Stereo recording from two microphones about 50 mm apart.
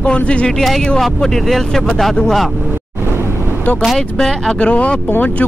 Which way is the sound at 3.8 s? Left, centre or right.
Centre.